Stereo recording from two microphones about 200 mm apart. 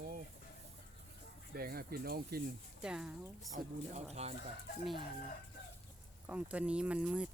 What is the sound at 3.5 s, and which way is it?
Speech, 35° right (ahead or behind).